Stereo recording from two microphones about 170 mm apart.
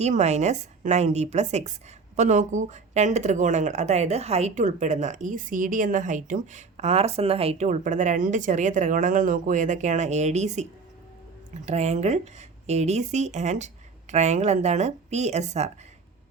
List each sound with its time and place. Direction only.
0.0 s speech: 40° right (ahead or behind)